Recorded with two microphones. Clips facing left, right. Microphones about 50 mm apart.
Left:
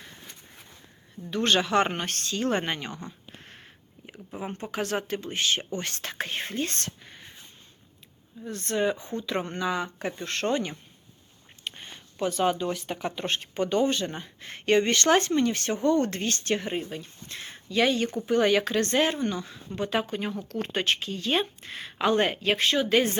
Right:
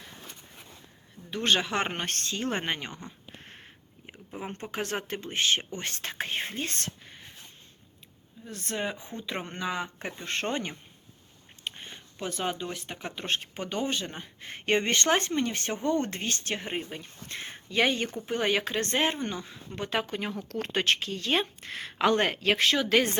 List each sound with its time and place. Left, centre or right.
1.3 s speech: centre
2.0 s speech: right
2.4 s speech: centre
3.4 s a sound: right
4.7 s speech: right; by 6.9 s centre
7.0 s a sound: centre
8.4 s speech: centre; by 10.7 s right
11.6 s speech: centre
16.6 s speech: right
18.3 s speech: centre
19.1 s speech: right
19.7 s speech: right
20.5 s speech: right